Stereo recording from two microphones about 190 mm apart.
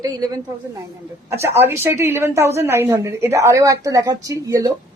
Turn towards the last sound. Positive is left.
turn(degrees=-15)  # may be behind; listen again after turning